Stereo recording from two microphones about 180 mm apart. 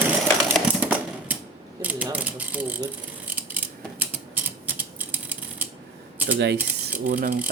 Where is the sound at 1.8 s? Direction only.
10° right (ahead or behind).